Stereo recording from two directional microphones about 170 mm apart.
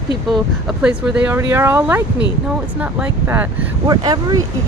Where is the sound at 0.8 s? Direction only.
5° right (ahead or behind).